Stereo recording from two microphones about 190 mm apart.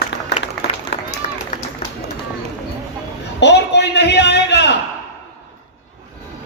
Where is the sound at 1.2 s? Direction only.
40° left (ahead or behind).